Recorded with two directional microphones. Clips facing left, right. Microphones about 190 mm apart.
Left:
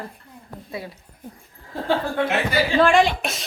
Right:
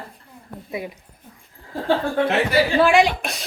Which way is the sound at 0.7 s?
15° right (ahead or behind).